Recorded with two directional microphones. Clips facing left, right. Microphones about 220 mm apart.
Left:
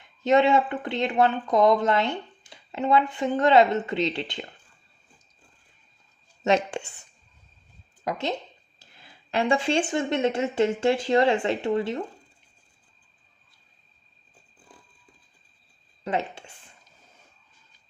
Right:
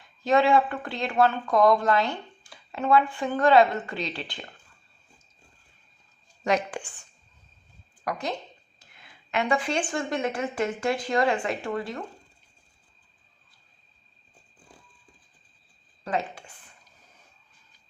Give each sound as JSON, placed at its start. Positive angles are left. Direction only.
{"t": 0.2, "sound": "speech", "side_deg": 20}
{"t": 6.4, "sound": "speech", "side_deg": 25}
{"t": 8.0, "sound": "speech", "side_deg": 25}
{"t": 16.0, "sound": "speech", "side_deg": 25}